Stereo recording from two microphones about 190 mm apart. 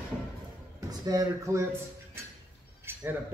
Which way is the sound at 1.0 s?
20° right (ahead or behind).